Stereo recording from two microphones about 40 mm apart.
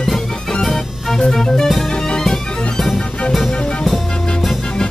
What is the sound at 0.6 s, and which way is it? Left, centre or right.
Music, centre.